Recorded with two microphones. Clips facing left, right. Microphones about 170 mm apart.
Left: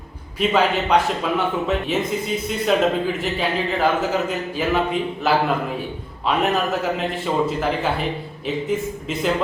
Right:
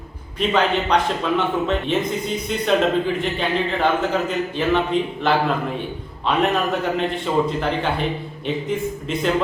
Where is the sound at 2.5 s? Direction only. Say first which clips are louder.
Right 1 dB; 5° left (ahead or behind).